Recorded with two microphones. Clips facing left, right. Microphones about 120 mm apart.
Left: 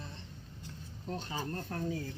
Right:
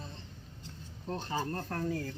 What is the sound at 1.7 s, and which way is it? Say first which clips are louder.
Speech: right 2 dB; 75° right (ahead or behind).